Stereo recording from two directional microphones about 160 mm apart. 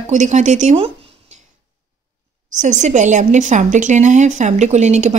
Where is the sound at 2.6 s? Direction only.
50° right (ahead or behind).